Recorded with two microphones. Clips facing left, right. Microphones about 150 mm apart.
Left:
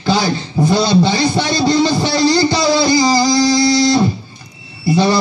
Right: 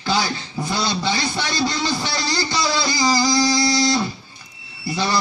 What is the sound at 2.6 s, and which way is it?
Guitar, 25° left (ahead or behind).